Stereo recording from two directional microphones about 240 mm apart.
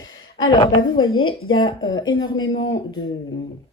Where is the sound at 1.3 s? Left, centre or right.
Left.